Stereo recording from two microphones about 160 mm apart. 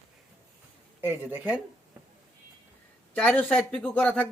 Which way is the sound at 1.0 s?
15° right (ahead or behind).